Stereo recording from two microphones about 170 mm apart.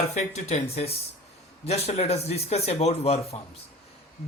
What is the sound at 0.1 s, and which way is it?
Speech, 40° left (ahead or behind).